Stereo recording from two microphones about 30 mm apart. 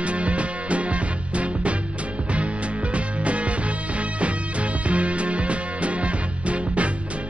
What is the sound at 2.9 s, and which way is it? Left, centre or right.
Music, right.